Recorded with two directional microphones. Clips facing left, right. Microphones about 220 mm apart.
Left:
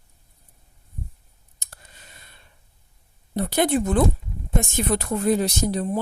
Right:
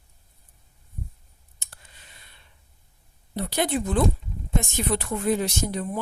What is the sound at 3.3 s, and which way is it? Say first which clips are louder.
Speech: left 5 dB; 50° left (ahead or behind).